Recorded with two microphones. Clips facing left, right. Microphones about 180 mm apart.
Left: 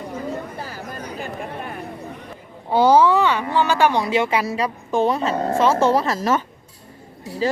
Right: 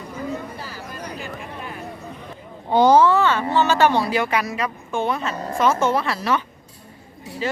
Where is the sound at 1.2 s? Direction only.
50° left (ahead or behind).